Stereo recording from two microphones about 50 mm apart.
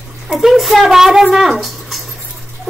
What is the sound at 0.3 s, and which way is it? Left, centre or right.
A woman's voice, centre.